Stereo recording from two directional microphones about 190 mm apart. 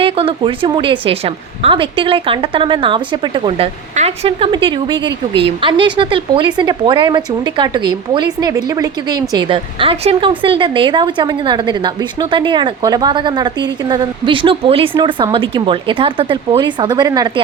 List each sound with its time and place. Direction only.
0.0 s a woman's voice: 30° right (ahead or behind)